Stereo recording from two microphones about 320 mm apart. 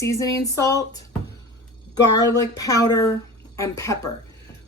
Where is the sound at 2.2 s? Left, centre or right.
Centre.